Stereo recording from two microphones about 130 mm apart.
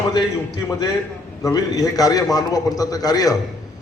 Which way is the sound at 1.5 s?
30° left (ahead or behind).